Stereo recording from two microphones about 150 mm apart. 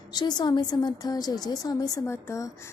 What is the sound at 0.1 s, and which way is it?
A woman's voice, 25° left (ahead or behind).